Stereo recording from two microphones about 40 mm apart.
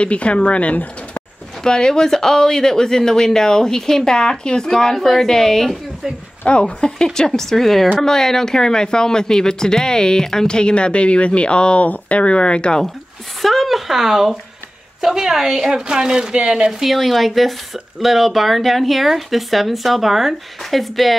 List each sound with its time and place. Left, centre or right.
0.0 s speech: left
1.6 s speech: centre
6.4 s speech: left
13.4 s a woman's voice: centre
15.7 s speech: centre
16.8 s speech: centre